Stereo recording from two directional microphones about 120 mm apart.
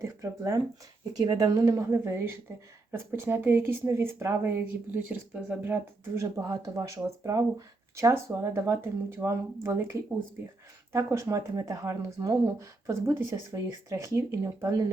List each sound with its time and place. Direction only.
0.0 s speech: 25° right (ahead or behind)
6.4 s speech: 30° right (ahead or behind)